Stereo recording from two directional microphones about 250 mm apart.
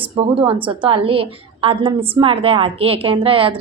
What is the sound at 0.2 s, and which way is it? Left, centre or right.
A woman's voice, right.